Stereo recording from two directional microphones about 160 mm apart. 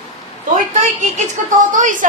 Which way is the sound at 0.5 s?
50° right (ahead or behind).